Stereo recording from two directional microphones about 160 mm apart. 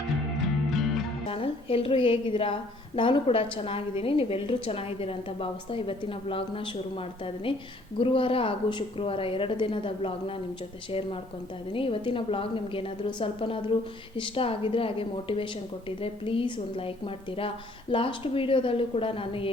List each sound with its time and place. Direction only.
0.7 s music: centre (ahead or behind)
1.3 s a woman's voice: 35° left (ahead or behind)
11.7 s a woman's voice: 35° left (ahead or behind)
17.9 s a woman's voice: 35° left (ahead or behind)